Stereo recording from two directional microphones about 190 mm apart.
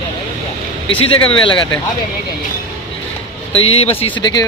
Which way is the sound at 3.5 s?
30° left (ahead or behind).